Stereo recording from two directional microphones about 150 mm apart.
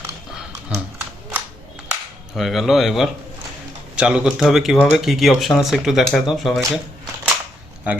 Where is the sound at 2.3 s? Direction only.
Centre (ahead or behind).